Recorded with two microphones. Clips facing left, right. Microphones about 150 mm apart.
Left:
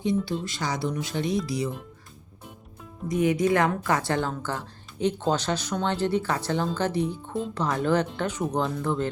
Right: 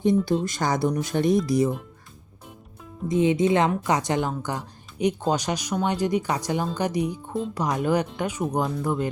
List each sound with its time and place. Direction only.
0.0 s speech: 45° right (ahead or behind)
3.1 s a woman's voice: 25° right (ahead or behind)